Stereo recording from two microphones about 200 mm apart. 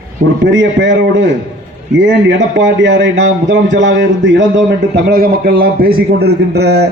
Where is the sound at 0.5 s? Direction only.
65° right (ahead or behind).